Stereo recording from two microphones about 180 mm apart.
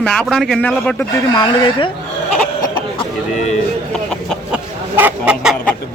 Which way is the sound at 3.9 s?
5° left (ahead or behind).